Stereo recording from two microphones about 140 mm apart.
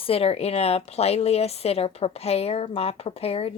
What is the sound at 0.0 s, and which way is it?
A woman's voice, 45° left (ahead or behind).